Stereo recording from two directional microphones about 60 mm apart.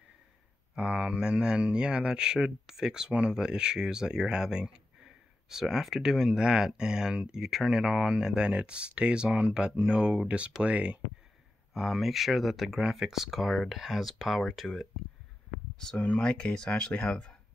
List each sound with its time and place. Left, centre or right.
0.7 s speech: centre
11.7 s speech: centre
15.7 s speech: centre